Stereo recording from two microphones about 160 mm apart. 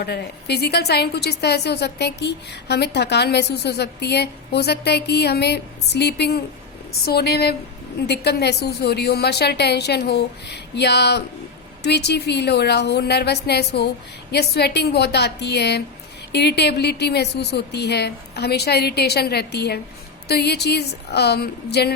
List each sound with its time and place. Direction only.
0.0 s a woman's voice: 90° left
7.0 s a woman's voice: 80° left